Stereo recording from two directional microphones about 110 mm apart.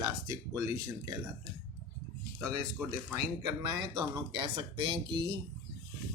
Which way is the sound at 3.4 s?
45° right (ahead or behind).